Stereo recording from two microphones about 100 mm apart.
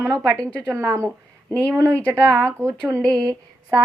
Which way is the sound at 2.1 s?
30° right (ahead or behind).